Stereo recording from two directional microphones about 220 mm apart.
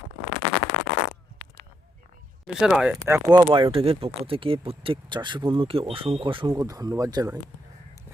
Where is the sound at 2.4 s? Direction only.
Centre (ahead or behind).